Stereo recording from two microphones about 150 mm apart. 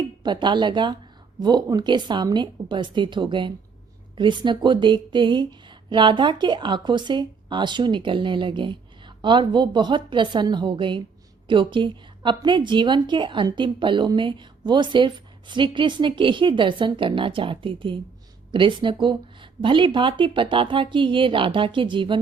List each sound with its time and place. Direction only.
0.0 s speech: 30° right (ahead or behind)